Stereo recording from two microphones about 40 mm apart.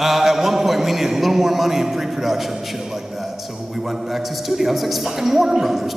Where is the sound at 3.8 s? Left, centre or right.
Centre.